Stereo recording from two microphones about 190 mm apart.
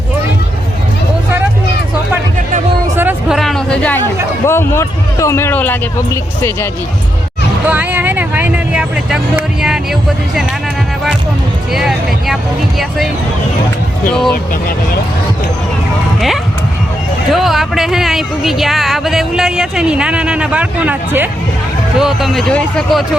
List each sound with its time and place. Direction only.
2.9 s a sound: 10° right (ahead or behind); by 4.0 s 5° left (ahead or behind)
4.4 s speech: 15° left (ahead or behind)
7.7 s speech: 10° right (ahead or behind)
11.7 s speech: centre (ahead or behind)
14.1 s speech: centre (ahead or behind)
17.3 s speech: centre (ahead or behind)